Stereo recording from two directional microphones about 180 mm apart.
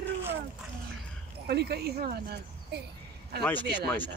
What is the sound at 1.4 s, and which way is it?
Speech, 60° right (ahead or behind).